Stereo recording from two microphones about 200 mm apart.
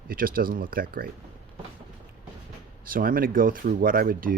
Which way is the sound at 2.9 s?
45° right (ahead or behind).